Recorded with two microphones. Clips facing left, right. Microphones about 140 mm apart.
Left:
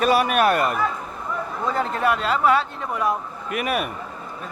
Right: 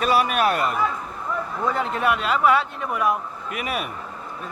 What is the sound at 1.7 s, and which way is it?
Speech, 40° left (ahead or behind).